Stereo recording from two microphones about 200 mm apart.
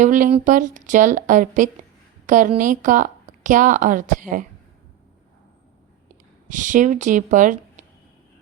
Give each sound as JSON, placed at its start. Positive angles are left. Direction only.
{"t": 0.0, "sound": "a woman's voice", "side_deg": -40}
{"t": 6.5, "sound": "speech", "side_deg": -40}